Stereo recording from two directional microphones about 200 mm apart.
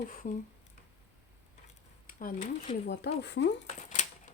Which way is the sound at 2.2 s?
40° left (ahead or behind).